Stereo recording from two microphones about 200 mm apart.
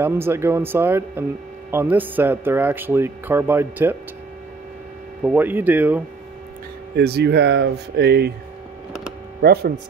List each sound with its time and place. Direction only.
0.0 s speech: 10° right (ahead or behind)
5.2 s speech: 10° right (ahead or behind)
7.0 s speech: 55° right (ahead or behind)
9.4 s speech: 50° right (ahead or behind)